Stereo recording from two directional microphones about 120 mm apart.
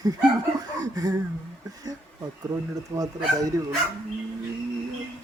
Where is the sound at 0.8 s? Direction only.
30° right (ahead or behind).